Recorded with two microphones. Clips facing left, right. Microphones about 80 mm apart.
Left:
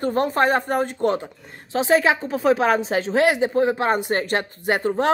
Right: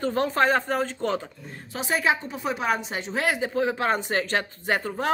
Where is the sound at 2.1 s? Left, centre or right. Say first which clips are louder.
Left 7 dB; left.